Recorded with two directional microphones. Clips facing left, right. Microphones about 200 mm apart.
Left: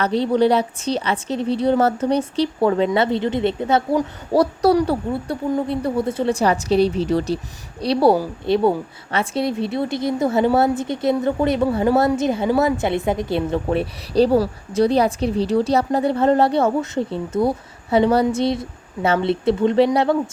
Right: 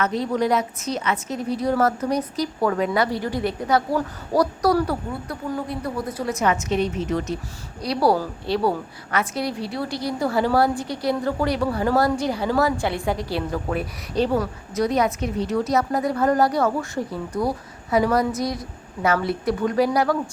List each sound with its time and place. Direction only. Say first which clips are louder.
0.0 s a woman's voice: left 5 dB; 30° left (ahead or behind)